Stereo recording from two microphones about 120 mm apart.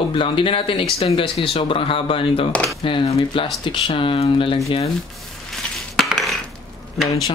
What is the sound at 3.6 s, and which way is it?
Speech, 45° left (ahead or behind).